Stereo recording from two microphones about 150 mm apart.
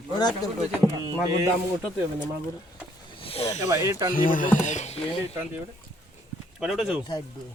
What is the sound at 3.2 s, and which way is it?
Snake, 40° left (ahead or behind).